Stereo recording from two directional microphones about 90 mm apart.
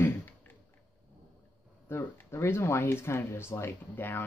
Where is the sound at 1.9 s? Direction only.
20° left (ahead or behind).